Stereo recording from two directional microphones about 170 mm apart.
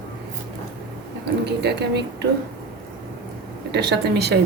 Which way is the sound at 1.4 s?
80° right.